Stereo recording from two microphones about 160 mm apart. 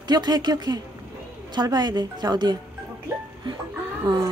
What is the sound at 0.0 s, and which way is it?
A woman's voice, 25° right (ahead or behind).